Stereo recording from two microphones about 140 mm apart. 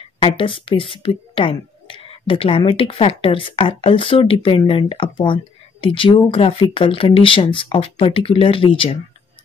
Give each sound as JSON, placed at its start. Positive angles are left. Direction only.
{"t": 0.2, "sound": "speech", "side_deg": 40}